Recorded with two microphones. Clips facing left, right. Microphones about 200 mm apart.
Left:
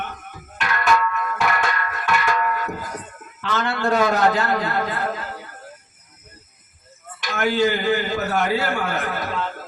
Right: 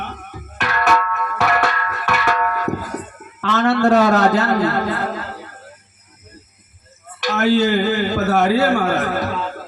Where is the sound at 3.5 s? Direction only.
40° right (ahead or behind).